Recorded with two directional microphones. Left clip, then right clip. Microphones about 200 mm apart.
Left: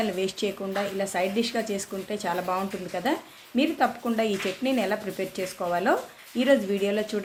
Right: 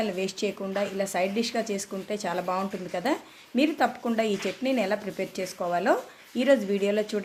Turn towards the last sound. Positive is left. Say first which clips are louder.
# even
turn(degrees=-15)  # may be behind; listen again after turning